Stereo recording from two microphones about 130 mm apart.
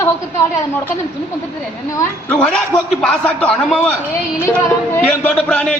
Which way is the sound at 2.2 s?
10° left (ahead or behind).